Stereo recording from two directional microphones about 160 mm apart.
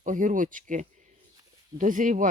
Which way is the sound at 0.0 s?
55° right (ahead or behind).